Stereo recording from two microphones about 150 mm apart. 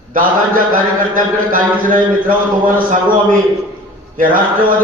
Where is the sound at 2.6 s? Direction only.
65° right (ahead or behind).